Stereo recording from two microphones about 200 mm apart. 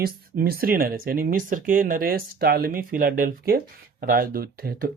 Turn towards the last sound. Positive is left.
turn(degrees=-45)  # may be behind; listen again after turning